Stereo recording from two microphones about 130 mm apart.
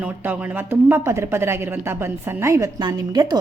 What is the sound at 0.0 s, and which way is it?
Speech, 15° right (ahead or behind).